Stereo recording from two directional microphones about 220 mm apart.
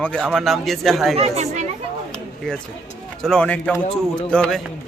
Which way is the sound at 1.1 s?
30° right (ahead or behind).